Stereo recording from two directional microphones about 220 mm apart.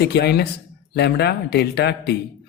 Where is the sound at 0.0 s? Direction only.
50° left (ahead or behind).